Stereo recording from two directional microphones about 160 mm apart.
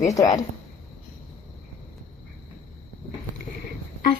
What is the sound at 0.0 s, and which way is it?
Speech, 20° left (ahead or behind).